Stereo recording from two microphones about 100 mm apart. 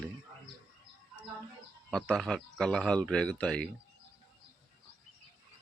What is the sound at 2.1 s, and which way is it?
Speech, centre (ahead or behind).